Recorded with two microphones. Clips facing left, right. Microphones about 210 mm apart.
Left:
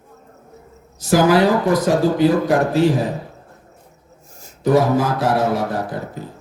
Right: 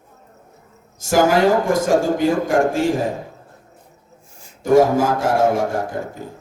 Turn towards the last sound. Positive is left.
turn(degrees=-45)  # may be behind; listen again after turning